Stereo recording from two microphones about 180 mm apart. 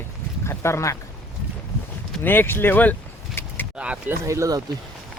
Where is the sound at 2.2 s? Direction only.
10° left (ahead or behind).